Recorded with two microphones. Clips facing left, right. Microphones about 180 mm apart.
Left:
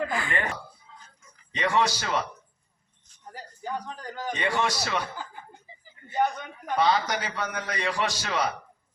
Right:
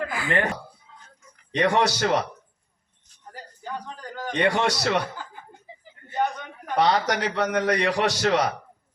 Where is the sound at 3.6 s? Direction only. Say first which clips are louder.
Left 1 dB; 10° left (ahead or behind).